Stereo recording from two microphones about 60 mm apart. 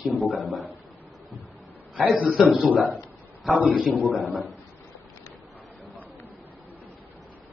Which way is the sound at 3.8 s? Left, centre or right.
Centre.